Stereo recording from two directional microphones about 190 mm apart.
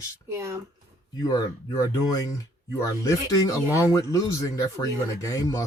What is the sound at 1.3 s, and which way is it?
Speech, 20° left (ahead or behind).